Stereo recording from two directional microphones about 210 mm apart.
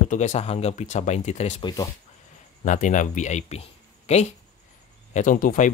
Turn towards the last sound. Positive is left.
turn(degrees=40)  # may be behind; listen again after turning